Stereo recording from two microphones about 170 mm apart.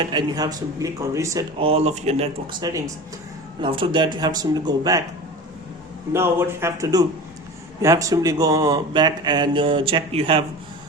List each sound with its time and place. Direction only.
0.0 s speech: 25° right (ahead or behind)
1.5 s speech: 35° right (ahead or behind)
2.6 s speech: 20° right (ahead or behind)
6.1 s speech: 15° right (ahead or behind); by 10.4 s 35° right (ahead or behind)